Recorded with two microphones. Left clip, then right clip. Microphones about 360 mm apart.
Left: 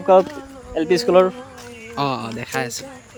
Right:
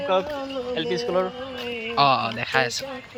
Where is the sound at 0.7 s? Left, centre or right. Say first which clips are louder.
Left 8 dB; left.